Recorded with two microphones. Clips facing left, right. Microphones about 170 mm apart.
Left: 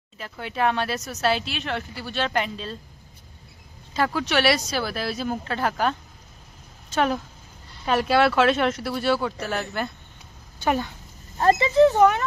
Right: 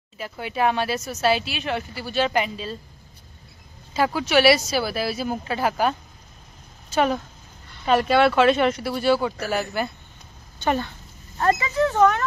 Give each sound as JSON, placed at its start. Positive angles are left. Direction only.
{"t": 0.2, "sound": "speech", "side_deg": -5}
{"t": 3.9, "sound": "speech", "side_deg": -5}
{"t": 10.6, "sound": "speech", "side_deg": 10}
{"t": 11.3, "sound": "speech", "side_deg": 30}
{"t": 12.0, "sound": "speech", "side_deg": 5}